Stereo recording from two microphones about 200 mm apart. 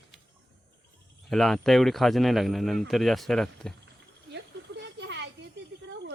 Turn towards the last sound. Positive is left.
turn(degrees=-65)  # may be behind; listen again after turning